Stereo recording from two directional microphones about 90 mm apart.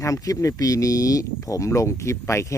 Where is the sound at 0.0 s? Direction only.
40° left (ahead or behind).